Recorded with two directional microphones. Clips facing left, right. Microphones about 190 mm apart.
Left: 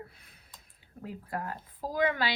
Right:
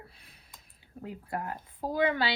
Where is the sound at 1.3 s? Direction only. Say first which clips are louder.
Right 1 dB; 25° right (ahead or behind).